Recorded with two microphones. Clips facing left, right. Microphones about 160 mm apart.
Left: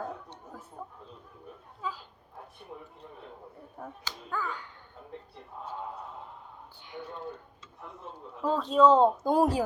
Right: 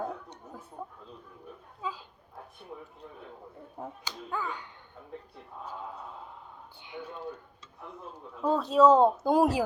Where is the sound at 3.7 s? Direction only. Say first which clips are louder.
Right 2 dB; 20° right (ahead or behind).